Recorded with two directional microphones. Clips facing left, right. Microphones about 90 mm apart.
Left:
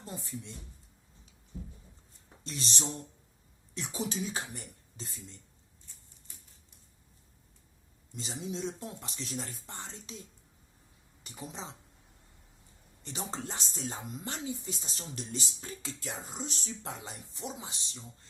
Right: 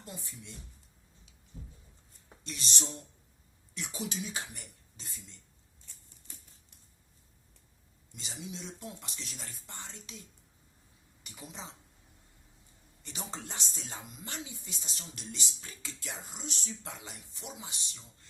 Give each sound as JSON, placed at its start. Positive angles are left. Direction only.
{"t": 0.0, "sound": "speech", "side_deg": 30}
{"t": 2.4, "sound": "speech", "side_deg": 35}
{"t": 8.1, "sound": "speech", "side_deg": 35}
{"t": 13.0, "sound": "speech", "side_deg": 30}